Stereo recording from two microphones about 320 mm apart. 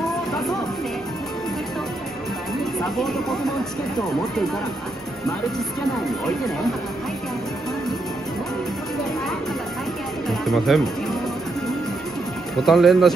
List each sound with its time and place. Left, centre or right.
2.8 s speech: centre
6.0 s speech: centre
10.4 s speech: centre
12.5 s speech: centre